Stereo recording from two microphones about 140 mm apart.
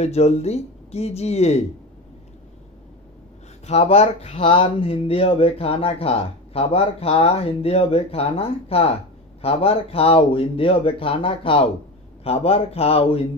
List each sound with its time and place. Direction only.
0.0 s speech: 50° left (ahead or behind)
3.6 s speech: 50° left (ahead or behind)
4.5 s speech: 40° left (ahead or behind)